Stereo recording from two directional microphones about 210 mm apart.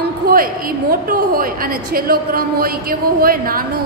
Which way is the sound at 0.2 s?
50° right (ahead or behind).